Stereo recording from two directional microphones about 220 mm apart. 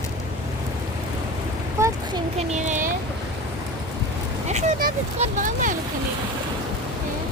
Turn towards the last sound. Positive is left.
turn(degrees=-35)  # may be behind; listen again after turning